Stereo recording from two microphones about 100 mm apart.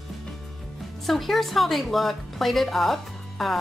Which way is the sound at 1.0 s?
Centre (ahead or behind).